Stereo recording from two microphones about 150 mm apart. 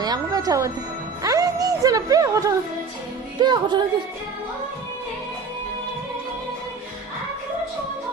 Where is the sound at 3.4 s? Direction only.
30° right (ahead or behind).